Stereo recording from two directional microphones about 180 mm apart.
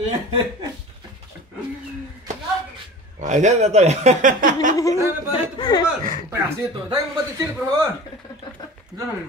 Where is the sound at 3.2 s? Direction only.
40° right (ahead or behind).